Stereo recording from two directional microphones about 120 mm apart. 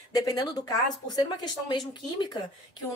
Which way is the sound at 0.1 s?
30° left (ahead or behind).